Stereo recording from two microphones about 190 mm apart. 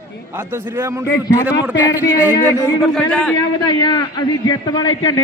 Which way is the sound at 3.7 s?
20° left (ahead or behind).